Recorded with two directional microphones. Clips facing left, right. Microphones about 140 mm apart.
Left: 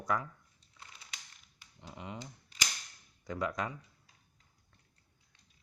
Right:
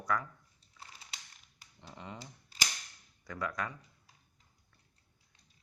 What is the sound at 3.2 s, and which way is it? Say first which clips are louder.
Speech: left 2 dB; 20° left (ahead or behind).